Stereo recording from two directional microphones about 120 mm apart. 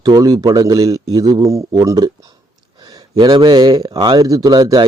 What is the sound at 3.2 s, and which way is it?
Speech, 35° right (ahead or behind).